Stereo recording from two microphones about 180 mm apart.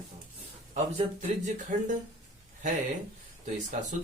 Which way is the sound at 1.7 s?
45° right (ahead or behind).